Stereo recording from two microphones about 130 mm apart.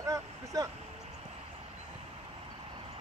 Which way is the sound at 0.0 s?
25° right (ahead or behind).